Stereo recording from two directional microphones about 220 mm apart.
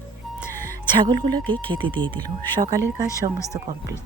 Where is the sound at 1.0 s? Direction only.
20° right (ahead or behind).